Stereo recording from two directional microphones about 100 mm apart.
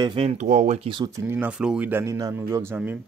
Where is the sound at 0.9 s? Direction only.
65° right (ahead or behind).